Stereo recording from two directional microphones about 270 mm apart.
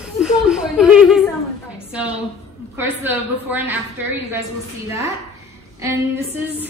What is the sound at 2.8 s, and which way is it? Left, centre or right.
Speech, centre.